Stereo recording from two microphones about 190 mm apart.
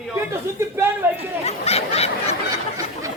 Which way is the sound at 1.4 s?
35° left (ahead or behind).